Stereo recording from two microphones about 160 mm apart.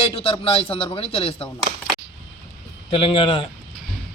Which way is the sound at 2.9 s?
35° left (ahead or behind).